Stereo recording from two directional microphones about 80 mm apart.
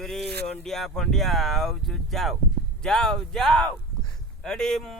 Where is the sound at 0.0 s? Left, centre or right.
Centre.